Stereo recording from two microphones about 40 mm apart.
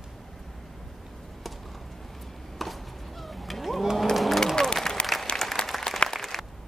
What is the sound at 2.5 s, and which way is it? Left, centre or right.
Chop, centre.